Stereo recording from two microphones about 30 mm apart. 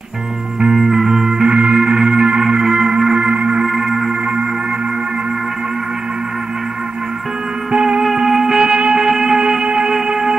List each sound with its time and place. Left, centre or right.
0.7 s music: centre
1.5 s music: right
3.6 s music: centre
7.7 s music: right
8.3 s music: centre